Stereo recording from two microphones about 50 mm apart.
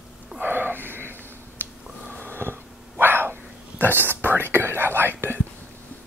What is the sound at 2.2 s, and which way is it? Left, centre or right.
Dog, right.